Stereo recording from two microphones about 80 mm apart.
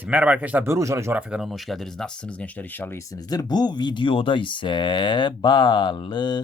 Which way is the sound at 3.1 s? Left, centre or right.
Left.